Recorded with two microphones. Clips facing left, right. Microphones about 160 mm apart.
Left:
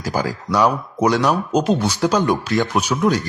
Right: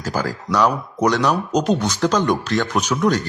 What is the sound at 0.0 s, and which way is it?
Speech, 10° left (ahead or behind).